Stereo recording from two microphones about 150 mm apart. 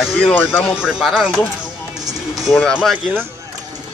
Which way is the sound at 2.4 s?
Centre (ahead or behind).